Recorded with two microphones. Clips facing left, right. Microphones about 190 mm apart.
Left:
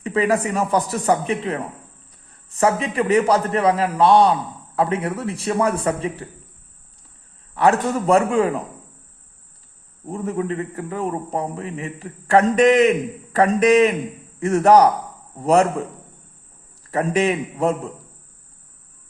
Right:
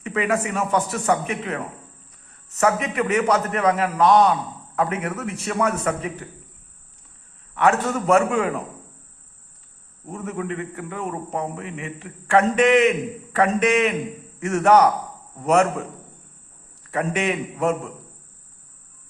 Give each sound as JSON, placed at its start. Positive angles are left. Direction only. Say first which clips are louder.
{"t": 0.0, "sound": "a man's voice", "louder": "left 3 dB", "side_deg": 35}
{"t": 7.5, "sound": "a man's voice", "louder": "left 2 dB", "side_deg": 35}
{"t": 10.1, "sound": "a man's voice", "louder": "left 4 dB", "side_deg": 30}
{"t": 16.9, "sound": "a man's voice", "louder": "left 4 dB", "side_deg": 35}